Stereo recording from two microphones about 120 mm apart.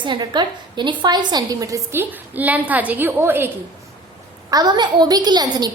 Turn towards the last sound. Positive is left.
turn(degrees=-35)  # may be behind; listen again after turning